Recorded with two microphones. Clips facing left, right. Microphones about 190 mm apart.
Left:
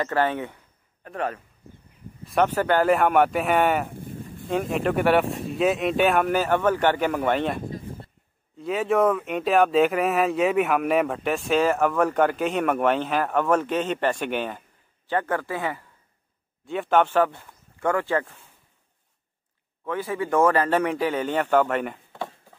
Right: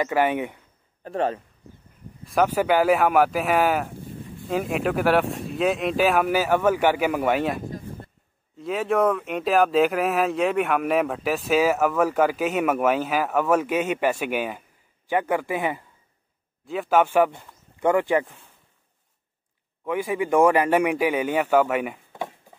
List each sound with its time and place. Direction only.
0.0 s speech: 10° right (ahead or behind)
1.0 s speech: 30° right (ahead or behind)
2.2 s speech: 5° right (ahead or behind)
4.0 s a sound: 50° left (ahead or behind)
4.5 s speech: 5° right (ahead or behind)
16.6 s speech: centre (ahead or behind)
19.8 s speech: 15° right (ahead or behind)